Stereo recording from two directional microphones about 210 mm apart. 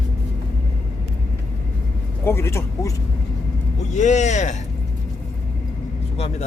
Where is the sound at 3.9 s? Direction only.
35° left (ahead or behind).